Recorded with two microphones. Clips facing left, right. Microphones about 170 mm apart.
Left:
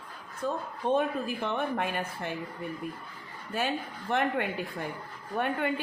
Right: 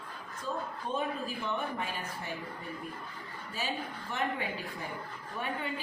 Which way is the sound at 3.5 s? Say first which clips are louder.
Left 6 dB; 60° left (ahead or behind).